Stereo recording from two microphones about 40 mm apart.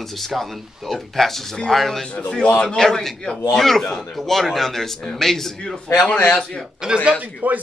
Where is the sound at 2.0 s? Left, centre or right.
Left.